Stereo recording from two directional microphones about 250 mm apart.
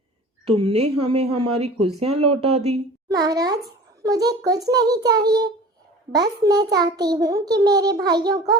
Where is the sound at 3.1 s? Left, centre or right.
Centre.